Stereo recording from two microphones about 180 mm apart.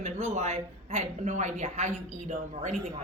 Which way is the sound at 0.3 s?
35° right (ahead or behind).